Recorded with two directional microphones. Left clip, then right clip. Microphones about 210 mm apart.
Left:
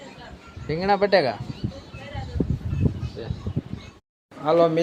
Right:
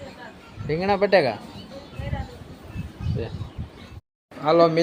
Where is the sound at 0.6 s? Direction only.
Centre (ahead or behind).